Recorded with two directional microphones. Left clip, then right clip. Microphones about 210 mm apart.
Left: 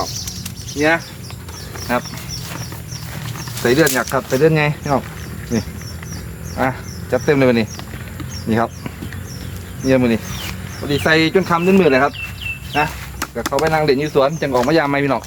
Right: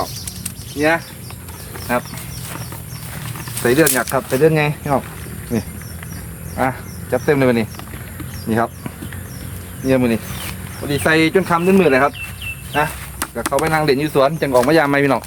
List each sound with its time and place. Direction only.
0.8 s speech: 5° right (ahead or behind)
3.3 s speech: 10° right (ahead or behind)
6.6 s speech: 10° right (ahead or behind)
12.7 s a sound: 15° right (ahead or behind)
13.7 s speech: 35° right (ahead or behind)